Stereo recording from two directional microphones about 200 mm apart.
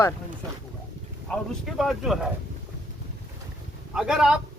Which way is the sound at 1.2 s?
Centre (ahead or behind).